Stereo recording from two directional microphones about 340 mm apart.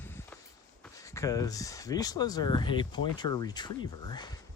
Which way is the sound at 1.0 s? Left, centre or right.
Centre.